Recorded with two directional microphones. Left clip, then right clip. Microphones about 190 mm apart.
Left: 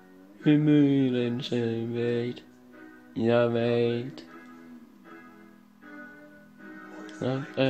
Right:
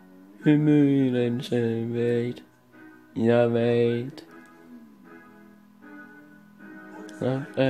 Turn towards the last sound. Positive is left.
turn(degrees=-20)  # may be behind; listen again after turning